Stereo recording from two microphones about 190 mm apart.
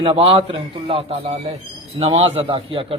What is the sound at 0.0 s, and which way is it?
A man's voice, 30° right (ahead or behind).